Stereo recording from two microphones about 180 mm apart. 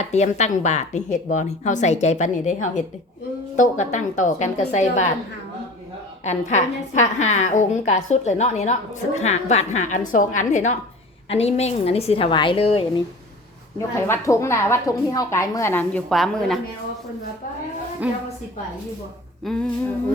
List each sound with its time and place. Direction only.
0.0 s a woman's voice: 40° left (ahead or behind)
6.2 s a woman's voice: 40° left (ahead or behind)
14.1 s a woman's voice: 15° left (ahead or behind)
18.0 s a woman's voice: 5° right (ahead or behind)
19.4 s humming: centre (ahead or behind)